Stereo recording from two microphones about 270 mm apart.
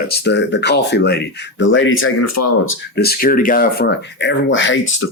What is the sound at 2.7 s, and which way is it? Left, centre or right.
Speech, left.